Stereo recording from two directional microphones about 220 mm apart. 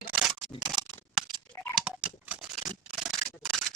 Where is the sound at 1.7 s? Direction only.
5° right (ahead or behind).